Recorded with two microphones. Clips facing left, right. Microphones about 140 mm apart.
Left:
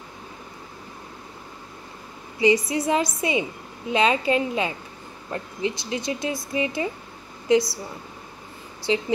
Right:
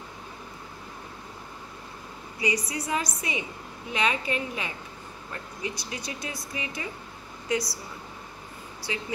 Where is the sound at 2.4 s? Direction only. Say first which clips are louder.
Left 10 dB; 25° left (ahead or behind).